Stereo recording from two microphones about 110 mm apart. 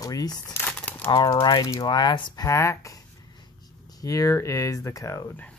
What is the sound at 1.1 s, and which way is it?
Speech, 45° left (ahead or behind).